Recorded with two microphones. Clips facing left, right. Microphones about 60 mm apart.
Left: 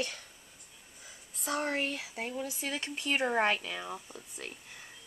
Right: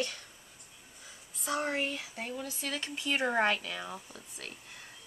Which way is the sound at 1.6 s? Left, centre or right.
Centre.